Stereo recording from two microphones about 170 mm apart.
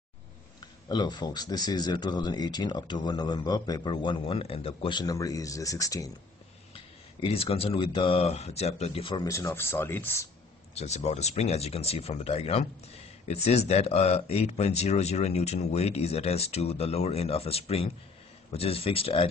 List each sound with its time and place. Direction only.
0.8 s speech: 25° left (ahead or behind)
6.7 s speech: 35° left (ahead or behind); by 10.2 s 10° left (ahead or behind)
10.7 s speech: 35° left (ahead or behind)